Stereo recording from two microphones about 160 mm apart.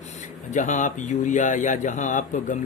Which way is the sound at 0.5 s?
50° left (ahead or behind).